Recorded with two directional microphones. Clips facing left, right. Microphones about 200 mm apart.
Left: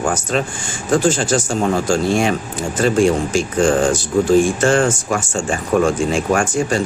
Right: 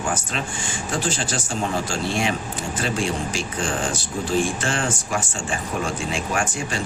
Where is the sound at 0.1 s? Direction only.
40° left (ahead or behind).